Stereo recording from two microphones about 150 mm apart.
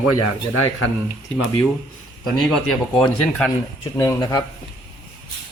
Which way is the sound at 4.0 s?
25° left (ahead or behind).